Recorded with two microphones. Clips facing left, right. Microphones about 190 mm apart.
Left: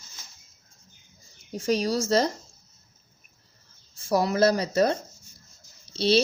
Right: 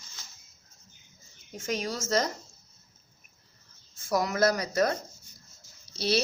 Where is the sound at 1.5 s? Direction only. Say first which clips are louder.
Left 8 dB; 35° left (ahead or behind).